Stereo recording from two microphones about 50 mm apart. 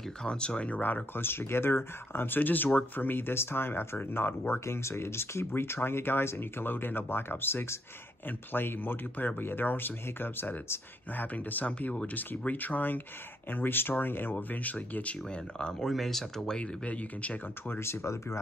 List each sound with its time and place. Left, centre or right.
0.2 s speech: centre
1.1 s speech: left
4.6 s speech: left
8.3 s speech: left
15.2 s speech: centre
15.9 s speech: centre
16.5 s speech: left
17.6 s speech: left